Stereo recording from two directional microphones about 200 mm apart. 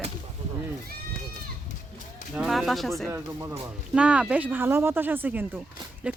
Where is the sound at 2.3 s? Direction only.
Centre (ahead or behind).